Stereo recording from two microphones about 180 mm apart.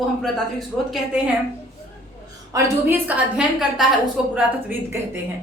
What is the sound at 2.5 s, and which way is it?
Speech, 10° right (ahead or behind).